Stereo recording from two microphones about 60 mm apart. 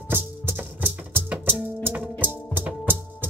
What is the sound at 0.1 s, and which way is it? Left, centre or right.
Music, right.